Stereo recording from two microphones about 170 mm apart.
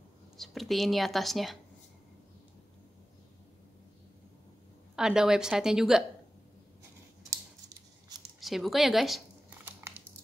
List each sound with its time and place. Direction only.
0.4 s speech: centre (ahead or behind)
4.9 s speech: 5° right (ahead or behind)
8.4 s speech: centre (ahead or behind)
9.7 s a sound: 15° right (ahead or behind)